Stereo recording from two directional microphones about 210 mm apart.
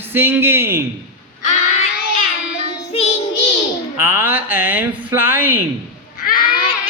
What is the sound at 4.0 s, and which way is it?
Mantra, 10° right (ahead or behind).